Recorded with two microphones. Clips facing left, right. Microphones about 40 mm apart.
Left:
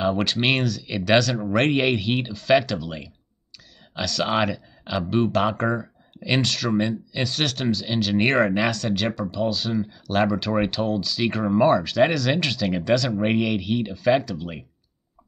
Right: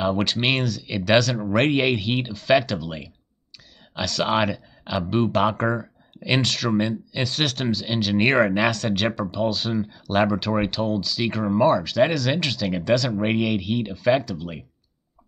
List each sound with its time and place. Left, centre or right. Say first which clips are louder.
0.0 s speech: even; centre
9.5 s speech: even; centre